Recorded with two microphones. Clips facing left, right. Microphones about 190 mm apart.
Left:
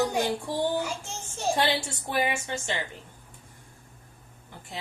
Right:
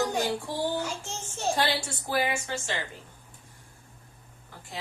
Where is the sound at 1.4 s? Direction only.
20° left (ahead or behind).